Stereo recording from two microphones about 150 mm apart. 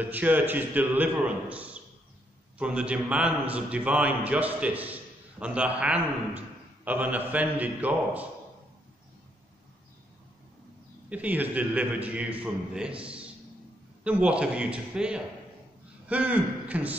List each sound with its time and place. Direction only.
0.0 s a man's voice: 10° right (ahead or behind)
11.1 s a man's voice: 10° right (ahead or behind)